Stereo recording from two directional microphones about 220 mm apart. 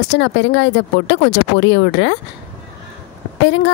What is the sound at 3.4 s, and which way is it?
Speech, 55° left (ahead or behind).